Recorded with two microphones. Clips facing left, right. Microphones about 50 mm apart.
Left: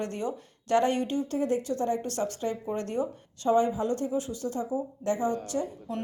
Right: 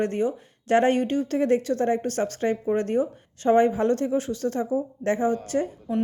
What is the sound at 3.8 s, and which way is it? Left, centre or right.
A woman's voice, right.